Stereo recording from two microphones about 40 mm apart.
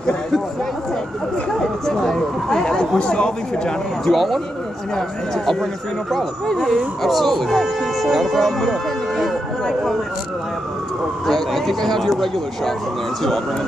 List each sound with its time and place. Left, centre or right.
1.9 s a sound: centre
3.0 s speech: left
4.0 s speech: centre
4.9 s speech: centre
7.0 s speech: centre
11.2 s speech: centre